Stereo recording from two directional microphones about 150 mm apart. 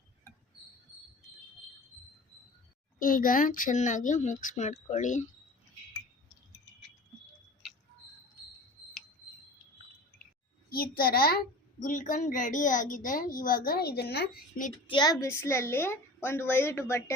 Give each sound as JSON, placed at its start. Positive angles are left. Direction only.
{"t": 3.0, "sound": "a woman's voice", "side_deg": 65}
{"t": 10.7, "sound": "a child's voice", "side_deg": 85}
{"t": 11.8, "sound": "a woman's voice", "side_deg": 60}
{"t": 14.8, "sound": "a child's voice", "side_deg": 30}